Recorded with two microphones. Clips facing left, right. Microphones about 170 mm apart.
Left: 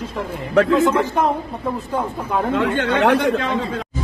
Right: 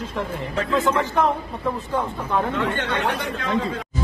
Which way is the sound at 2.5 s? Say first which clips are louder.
Left 5 dB; 80° left.